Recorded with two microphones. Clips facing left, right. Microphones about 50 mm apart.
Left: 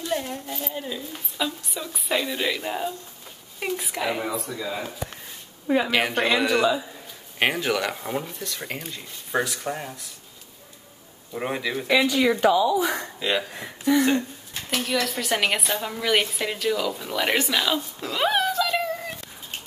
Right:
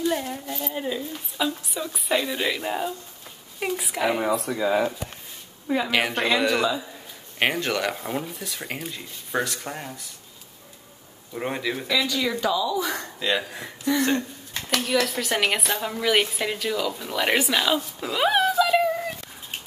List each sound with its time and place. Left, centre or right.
0.3 s a woman's voice: centre
1.1 s a woman's voice: centre
4.5 s speech: right
5.9 s a woman's voice: centre
11.3 s a woman's voice: centre
11.9 s a woman's voice: left
12.8 s speech: centre
13.4 s a woman's voice: centre